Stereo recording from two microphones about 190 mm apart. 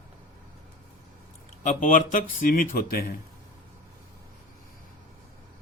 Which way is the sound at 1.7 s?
40° left (ahead or behind).